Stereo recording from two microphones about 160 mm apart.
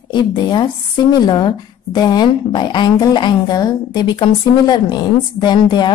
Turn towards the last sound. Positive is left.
turn(degrees=30)  # may be behind; listen again after turning